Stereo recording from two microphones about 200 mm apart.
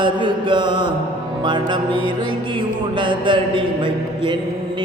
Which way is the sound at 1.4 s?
25° right (ahead or behind).